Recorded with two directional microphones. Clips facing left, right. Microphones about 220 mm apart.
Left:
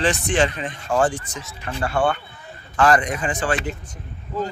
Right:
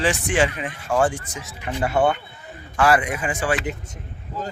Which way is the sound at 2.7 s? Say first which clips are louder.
Left 1 dB; 10° right (ahead or behind).